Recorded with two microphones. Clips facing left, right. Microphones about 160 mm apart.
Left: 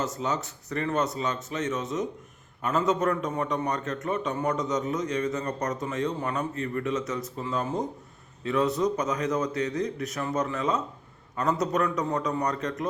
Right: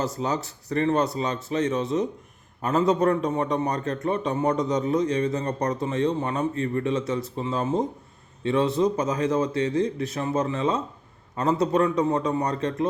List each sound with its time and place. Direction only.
0.0 s a man's voice: 35° right (ahead or behind)